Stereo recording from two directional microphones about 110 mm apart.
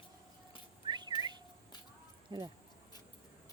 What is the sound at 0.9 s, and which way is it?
Whistling, 40° right (ahead or behind).